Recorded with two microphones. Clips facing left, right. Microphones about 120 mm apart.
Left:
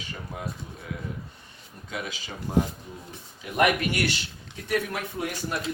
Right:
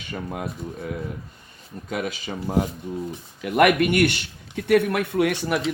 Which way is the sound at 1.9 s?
45° right (ahead or behind).